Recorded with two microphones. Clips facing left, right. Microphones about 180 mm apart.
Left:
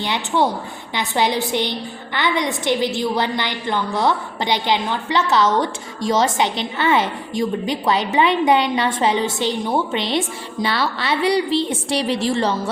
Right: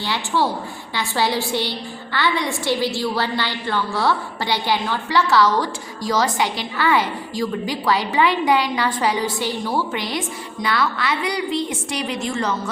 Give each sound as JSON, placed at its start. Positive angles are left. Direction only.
{"t": 0.0, "sound": "a woman's voice", "side_deg": 20}